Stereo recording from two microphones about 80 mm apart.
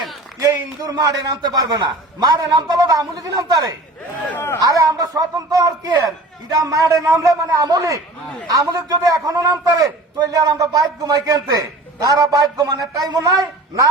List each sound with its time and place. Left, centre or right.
0.5 s a man's voice: right
4.2 s speech: centre
4.6 s a man's voice: right
7.0 s a man's voice: right
7.3 s a man's voice: right